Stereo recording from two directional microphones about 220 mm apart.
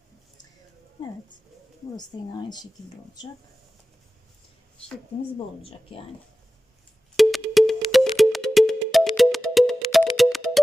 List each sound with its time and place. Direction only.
2.0 s speech: 20° left (ahead or behind)
7.2 s music: centre (ahead or behind)